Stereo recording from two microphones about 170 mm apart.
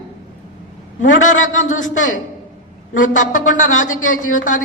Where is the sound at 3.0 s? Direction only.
50° left (ahead or behind).